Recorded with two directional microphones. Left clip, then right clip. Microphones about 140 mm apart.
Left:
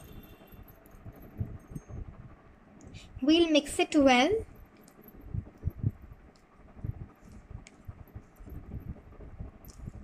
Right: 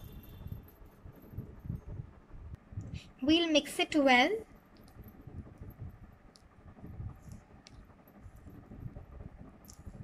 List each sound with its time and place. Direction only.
2.8 s a woman's voice: 25° left (ahead or behind)